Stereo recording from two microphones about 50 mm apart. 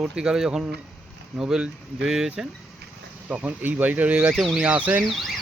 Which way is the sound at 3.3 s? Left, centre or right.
Right.